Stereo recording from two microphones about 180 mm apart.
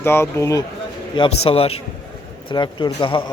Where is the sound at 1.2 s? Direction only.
30° left (ahead or behind).